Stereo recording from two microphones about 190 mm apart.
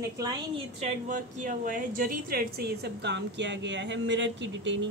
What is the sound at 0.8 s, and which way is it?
A woman's voice, 45° right (ahead or behind).